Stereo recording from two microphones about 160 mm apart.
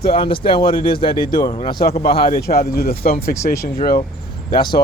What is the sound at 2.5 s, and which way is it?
Speech, 70° left (ahead or behind).